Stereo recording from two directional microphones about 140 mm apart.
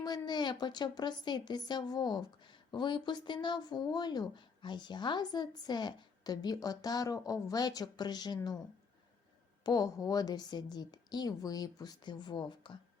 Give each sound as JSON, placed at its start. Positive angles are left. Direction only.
{"t": 0.0, "sound": "a woman's voice", "side_deg": 30}
{"t": 9.6, "sound": "a woman's voice", "side_deg": 25}